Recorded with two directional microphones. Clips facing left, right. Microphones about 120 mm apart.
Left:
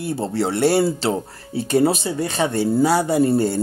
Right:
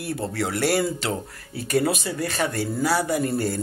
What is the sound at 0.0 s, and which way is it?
Speech, 25° left (ahead or behind).